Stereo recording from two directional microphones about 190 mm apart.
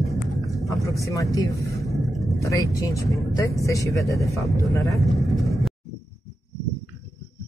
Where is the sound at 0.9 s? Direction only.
15° left (ahead or behind).